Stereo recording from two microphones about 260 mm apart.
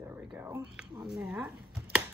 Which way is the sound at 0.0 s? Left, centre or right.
Centre.